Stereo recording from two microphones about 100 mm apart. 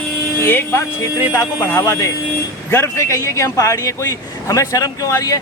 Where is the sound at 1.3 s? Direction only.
35° left (ahead or behind).